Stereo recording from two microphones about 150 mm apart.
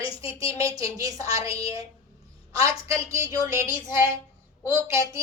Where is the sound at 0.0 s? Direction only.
35° left (ahead or behind).